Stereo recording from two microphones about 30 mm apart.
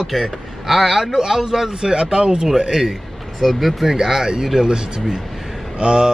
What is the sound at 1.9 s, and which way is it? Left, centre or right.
Speech, right.